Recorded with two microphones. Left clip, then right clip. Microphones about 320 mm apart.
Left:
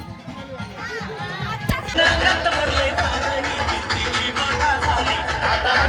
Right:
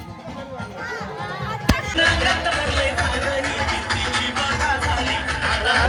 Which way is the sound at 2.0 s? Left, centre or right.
Left.